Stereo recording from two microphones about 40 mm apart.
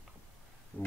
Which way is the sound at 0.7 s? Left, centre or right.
Left.